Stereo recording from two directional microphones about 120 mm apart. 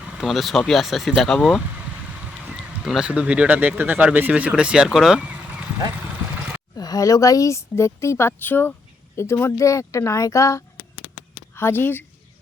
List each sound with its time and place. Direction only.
0.0 s speech: centre (ahead or behind)
2.8 s speech: 5° right (ahead or behind)
6.7 s speech: 30° left (ahead or behind)